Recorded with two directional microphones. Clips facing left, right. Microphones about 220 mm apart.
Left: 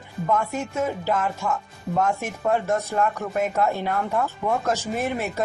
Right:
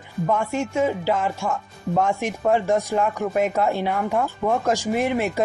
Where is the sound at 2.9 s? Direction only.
10° right (ahead or behind).